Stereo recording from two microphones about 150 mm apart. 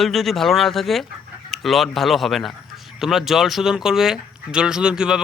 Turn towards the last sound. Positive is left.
turn(degrees=-5)  # may be behind; listen again after turning